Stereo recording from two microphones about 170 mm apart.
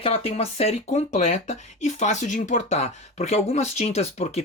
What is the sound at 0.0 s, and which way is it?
Speech, 35° left (ahead or behind).